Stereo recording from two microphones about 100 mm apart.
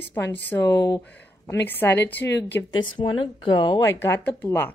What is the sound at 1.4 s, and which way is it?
Speech, 20° left (ahead or behind).